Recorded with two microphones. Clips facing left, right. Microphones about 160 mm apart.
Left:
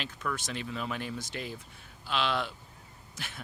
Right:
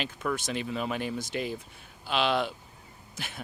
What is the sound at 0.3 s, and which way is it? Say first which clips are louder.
A man's voice: right 5 dB; 15° right (ahead or behind).